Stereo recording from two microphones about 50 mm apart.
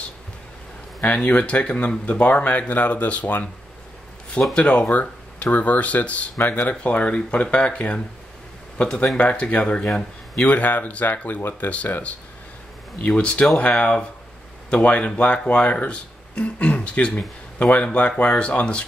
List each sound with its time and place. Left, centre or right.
1.0 s speech: left
4.6 s speech: left
8.8 s speech: centre
9.1 s speech: left
13.0 s speech: left